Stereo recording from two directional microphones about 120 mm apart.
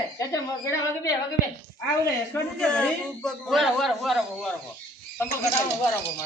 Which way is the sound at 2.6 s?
10° left (ahead or behind).